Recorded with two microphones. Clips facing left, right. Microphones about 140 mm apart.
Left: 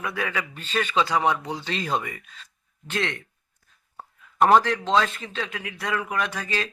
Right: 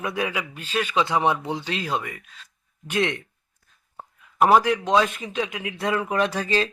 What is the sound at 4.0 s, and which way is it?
A man's voice, 10° right (ahead or behind).